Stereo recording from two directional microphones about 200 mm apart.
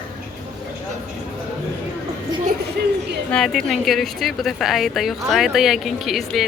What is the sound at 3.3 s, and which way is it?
A woman's voice, centre (ahead or behind).